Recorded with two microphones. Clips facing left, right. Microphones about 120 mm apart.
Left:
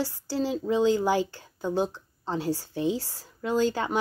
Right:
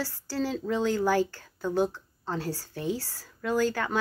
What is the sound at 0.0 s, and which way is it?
Speech, 15° left (ahead or behind).